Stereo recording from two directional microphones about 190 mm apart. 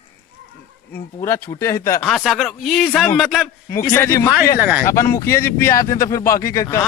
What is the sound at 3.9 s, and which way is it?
Speech, 15° left (ahead or behind).